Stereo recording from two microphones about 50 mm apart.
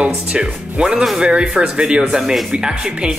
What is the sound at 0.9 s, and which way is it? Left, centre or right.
Speech, centre.